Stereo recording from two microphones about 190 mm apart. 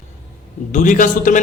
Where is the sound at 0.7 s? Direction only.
40° left (ahead or behind).